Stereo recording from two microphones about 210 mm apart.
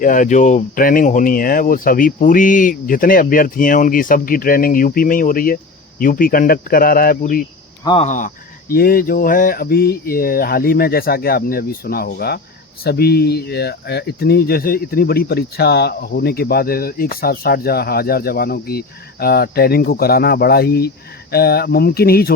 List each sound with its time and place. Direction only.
0.0 s speech: 40° left (ahead or behind)
7.9 s speech: 30° left (ahead or behind); by 22.3 s 45° left (ahead or behind)